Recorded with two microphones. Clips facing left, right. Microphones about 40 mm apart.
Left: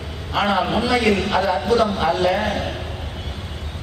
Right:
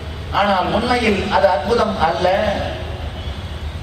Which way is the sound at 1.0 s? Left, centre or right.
Right.